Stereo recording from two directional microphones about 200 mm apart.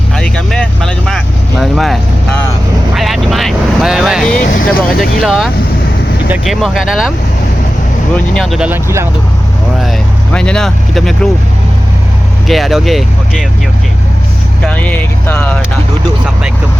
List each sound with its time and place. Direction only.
0.2 s vehicle: 5° left (ahead or behind)
4.4 s vehicle: 45° left (ahead or behind)
5.2 s speech: centre (ahead or behind)
8.1 s speech: 5° left (ahead or behind); by 9.0 s 10° right (ahead or behind)
10.3 s speech: 5° left (ahead or behind)
12.5 s speech: centre (ahead or behind)
14.6 s speech: 5° left (ahead or behind)